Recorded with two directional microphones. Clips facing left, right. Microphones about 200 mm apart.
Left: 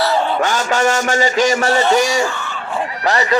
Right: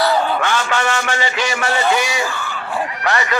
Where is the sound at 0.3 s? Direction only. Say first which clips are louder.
Left 2 dB; 40° left (ahead or behind).